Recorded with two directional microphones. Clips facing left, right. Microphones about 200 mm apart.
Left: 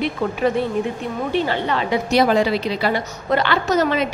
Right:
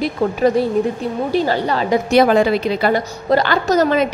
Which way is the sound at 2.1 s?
50° right (ahead or behind).